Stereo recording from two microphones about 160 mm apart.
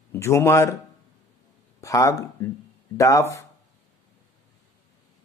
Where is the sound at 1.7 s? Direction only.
20° left (ahead or behind).